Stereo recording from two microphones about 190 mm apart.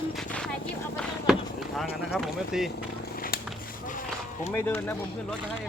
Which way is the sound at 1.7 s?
Centre (ahead or behind).